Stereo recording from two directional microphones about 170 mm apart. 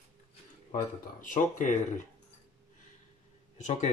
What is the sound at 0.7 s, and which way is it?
Speech, 50° left (ahead or behind).